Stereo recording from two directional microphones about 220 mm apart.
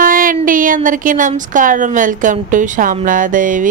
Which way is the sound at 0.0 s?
40° right (ahead or behind).